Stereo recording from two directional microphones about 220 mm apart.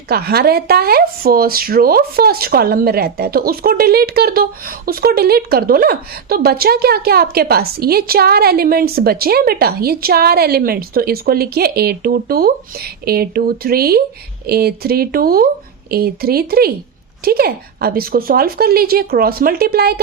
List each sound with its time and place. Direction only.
0.1 s speech: 45° right (ahead or behind)